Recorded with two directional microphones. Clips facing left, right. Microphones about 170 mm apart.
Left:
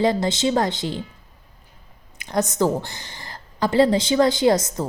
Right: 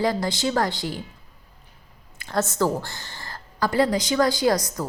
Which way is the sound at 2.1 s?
15° left (ahead or behind).